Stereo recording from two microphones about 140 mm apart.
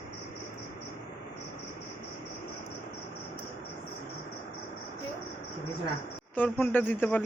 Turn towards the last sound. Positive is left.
turn(degrees=15)  # may be behind; listen again after turning